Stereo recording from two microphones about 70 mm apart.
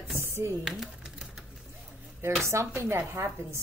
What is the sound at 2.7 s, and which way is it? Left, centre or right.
Speech, right.